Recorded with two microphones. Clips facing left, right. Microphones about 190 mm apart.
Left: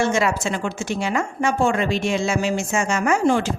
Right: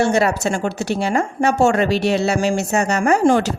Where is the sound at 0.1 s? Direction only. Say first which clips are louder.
Right 4 dB; 40° right (ahead or behind).